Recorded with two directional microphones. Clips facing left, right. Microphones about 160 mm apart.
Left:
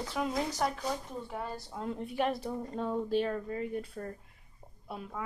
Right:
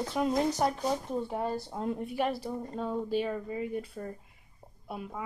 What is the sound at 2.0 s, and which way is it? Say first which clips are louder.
Speech: left 3 dB; 5° right (ahead or behind).